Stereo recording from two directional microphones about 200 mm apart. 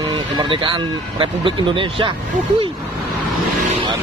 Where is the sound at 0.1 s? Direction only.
25° right (ahead or behind).